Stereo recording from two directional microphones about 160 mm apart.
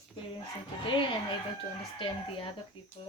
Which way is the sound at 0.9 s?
30° left (ahead or behind).